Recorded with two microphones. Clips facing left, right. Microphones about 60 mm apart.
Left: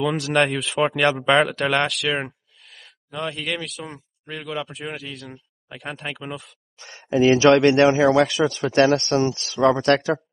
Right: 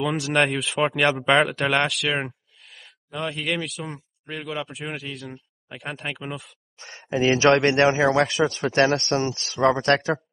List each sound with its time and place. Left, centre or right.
0.2 s speech: centre
6.8 s speech: right